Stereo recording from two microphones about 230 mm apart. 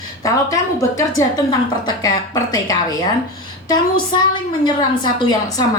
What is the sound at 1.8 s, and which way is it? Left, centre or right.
A woman's voice, centre.